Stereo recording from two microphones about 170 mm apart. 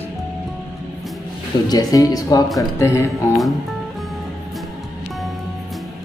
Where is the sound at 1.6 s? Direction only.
20° left (ahead or behind).